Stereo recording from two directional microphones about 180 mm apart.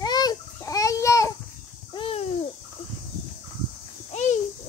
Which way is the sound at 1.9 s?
30° left (ahead or behind).